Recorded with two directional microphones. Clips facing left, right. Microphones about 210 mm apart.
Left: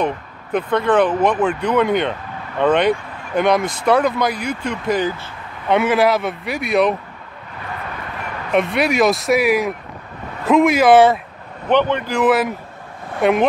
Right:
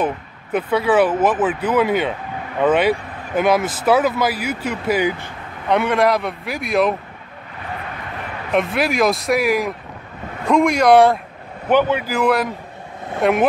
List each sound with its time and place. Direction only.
0.0 s speech: 5° right (ahead or behind)
5.7 s speech: centre (ahead or behind)
8.5 s speech: centre (ahead or behind)